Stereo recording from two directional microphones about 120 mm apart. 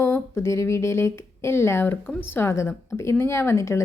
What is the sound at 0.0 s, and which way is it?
Speech, 20° left (ahead or behind).